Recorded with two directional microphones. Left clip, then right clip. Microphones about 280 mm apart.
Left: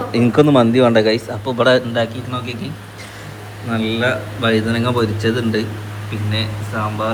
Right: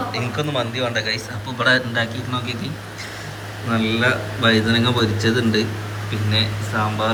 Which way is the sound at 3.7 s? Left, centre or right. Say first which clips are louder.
Left 1 dB; centre.